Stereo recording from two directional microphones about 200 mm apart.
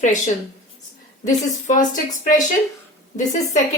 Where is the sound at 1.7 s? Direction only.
40° left (ahead or behind).